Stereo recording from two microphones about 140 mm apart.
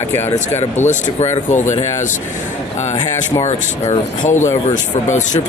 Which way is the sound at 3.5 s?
55° left (ahead or behind).